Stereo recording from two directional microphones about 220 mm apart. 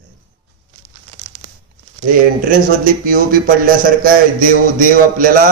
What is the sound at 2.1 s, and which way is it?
A man's voice, 40° right (ahead or behind).